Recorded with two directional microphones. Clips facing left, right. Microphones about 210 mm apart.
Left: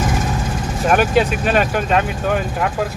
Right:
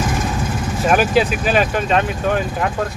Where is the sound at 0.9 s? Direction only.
Centre (ahead or behind).